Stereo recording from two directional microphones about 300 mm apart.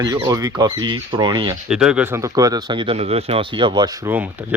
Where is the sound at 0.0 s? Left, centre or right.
Centre.